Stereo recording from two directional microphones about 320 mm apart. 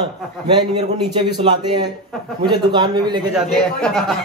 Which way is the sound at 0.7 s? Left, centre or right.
Centre.